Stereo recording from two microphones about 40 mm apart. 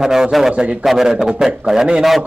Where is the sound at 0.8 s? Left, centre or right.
Centre.